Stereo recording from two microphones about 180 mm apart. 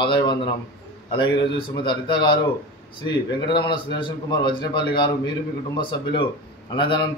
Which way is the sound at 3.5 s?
25° left (ahead or behind).